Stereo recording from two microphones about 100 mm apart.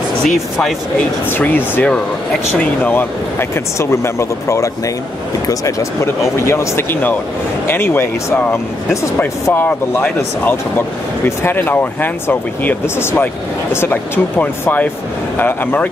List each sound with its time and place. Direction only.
0.2 s speech: 5° left (ahead or behind)
0.9 s speech: 15° left (ahead or behind)